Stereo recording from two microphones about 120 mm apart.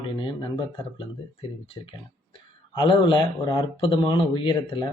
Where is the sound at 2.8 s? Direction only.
40° left (ahead or behind).